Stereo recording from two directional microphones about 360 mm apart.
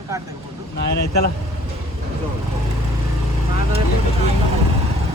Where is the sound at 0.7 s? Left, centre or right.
Left.